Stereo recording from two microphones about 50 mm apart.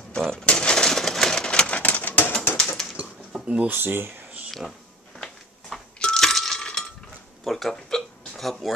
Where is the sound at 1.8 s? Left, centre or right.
Left.